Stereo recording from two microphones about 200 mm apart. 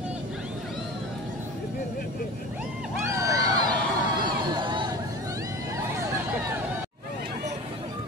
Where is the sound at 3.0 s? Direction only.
15° right (ahead or behind).